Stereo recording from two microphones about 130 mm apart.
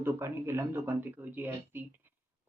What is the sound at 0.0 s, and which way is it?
Speech, 20° right (ahead or behind).